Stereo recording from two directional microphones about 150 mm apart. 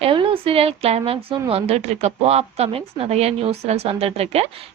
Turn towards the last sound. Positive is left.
turn(degrees=-45)  # may be behind; listen again after turning